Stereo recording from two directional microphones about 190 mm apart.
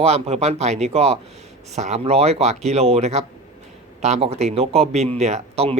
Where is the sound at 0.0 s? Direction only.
35° right (ahead or behind).